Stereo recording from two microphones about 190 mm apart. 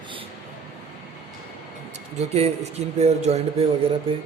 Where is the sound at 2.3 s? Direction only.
35° right (ahead or behind).